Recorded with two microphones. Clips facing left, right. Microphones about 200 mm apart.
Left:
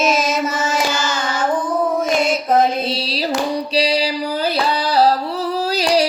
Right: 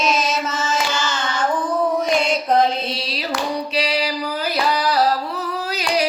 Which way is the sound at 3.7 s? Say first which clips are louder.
Left 6 dB; 30° left (ahead or behind).